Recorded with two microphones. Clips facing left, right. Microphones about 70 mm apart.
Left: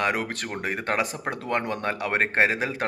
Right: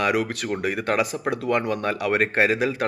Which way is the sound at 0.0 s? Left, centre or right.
Left.